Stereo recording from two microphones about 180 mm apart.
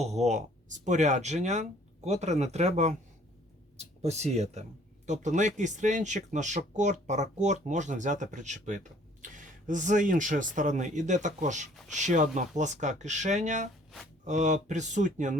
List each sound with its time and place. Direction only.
0.0 s speech: 40° right (ahead or behind)
4.0 s speech: 40° right (ahead or behind)